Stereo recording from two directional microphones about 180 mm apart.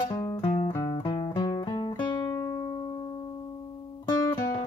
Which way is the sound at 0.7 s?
20° left (ahead or behind).